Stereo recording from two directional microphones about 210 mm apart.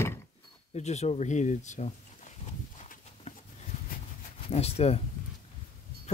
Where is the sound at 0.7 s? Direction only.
30° left (ahead or behind).